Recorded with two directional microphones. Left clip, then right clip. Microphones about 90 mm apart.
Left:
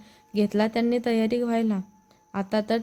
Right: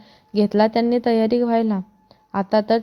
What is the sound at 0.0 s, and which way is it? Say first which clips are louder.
A woman's voice: right 6 dB; 35° right (ahead or behind).